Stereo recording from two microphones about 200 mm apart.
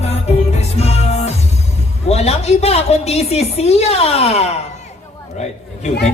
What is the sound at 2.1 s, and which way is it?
A woman's voice, 30° left (ahead or behind).